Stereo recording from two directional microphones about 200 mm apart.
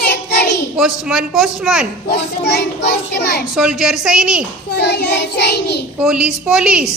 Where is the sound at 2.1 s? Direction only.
55° left (ahead or behind).